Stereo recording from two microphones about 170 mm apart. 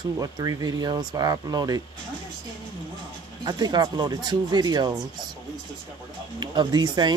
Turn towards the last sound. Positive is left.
turn(degrees=-25)  # may be behind; listen again after turning